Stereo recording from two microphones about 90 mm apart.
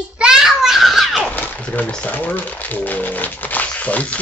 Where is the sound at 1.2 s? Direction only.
20° left (ahead or behind).